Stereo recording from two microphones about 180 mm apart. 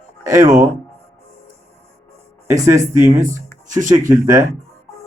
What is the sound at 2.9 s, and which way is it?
Speech, 45° right (ahead or behind).